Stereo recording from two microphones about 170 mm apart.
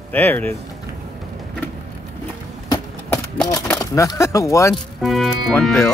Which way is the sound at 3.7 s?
20° left (ahead or behind).